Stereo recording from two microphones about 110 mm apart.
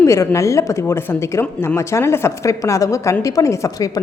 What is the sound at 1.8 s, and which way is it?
Speech, 25° left (ahead or behind).